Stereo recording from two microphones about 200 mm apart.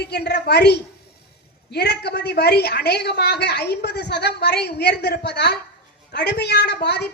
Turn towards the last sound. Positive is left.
turn(degrees=55)  # may be behind; listen again after turning